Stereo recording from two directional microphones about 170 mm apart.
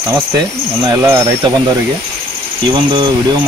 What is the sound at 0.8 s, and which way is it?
Speech, 20° right (ahead or behind).